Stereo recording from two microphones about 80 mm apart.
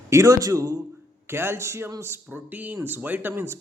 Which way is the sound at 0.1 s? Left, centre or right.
Right.